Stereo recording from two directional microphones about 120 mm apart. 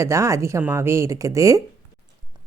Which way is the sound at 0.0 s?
25° right (ahead or behind).